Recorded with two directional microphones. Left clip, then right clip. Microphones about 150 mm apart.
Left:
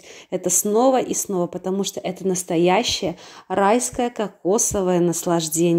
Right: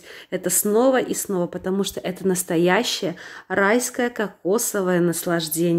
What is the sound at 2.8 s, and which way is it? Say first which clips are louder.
Speech: left 2 dB; 45° right (ahead or behind).